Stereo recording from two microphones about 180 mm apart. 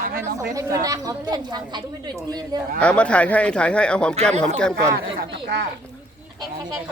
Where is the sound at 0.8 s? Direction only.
20° right (ahead or behind).